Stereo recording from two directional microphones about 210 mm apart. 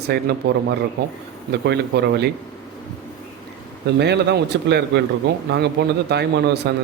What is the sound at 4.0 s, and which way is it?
Speech, 50° right (ahead or behind).